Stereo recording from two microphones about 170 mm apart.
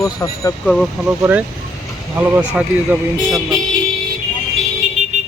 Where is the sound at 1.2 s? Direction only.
10° right (ahead or behind).